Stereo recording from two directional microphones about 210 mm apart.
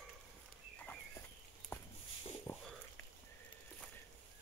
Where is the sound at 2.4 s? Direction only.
10° left (ahead or behind).